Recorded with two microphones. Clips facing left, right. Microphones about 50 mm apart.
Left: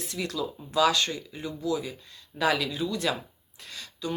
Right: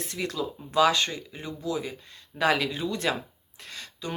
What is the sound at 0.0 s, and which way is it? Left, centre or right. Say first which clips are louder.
Speech: right 1 dB; right.